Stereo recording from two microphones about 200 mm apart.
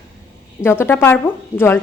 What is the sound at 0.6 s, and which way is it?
A woman's voice, 10° left (ahead or behind).